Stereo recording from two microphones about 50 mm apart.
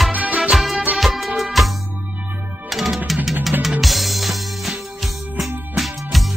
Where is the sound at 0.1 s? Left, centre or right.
Right.